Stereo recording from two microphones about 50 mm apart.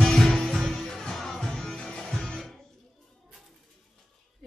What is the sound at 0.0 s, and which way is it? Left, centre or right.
Music, centre.